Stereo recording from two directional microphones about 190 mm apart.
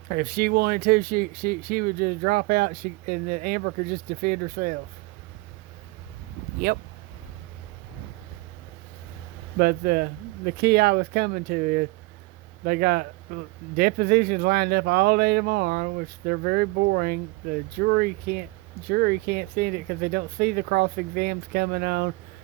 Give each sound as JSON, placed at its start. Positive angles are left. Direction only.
{"t": 0.1, "sound": "speech", "side_deg": -50}
{"t": 6.7, "sound": "speech", "side_deg": -50}
{"t": 9.6, "sound": "speech", "side_deg": -55}